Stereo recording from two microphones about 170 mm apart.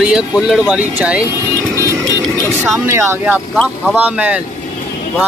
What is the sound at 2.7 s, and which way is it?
Speech, 15° right (ahead or behind).